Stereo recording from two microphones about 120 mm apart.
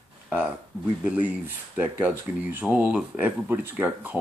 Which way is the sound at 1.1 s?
15° right (ahead or behind).